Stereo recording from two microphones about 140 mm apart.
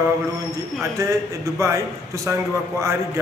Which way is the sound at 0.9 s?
20° right (ahead or behind).